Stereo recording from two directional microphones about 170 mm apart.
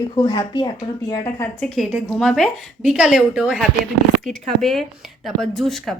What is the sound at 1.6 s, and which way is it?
Speech, centre (ahead or behind).